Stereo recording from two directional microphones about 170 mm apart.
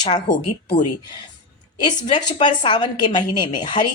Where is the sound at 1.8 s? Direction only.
25° left (ahead or behind).